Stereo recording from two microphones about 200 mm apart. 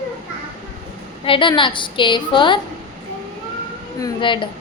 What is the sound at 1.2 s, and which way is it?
A woman's voice, 25° left (ahead or behind).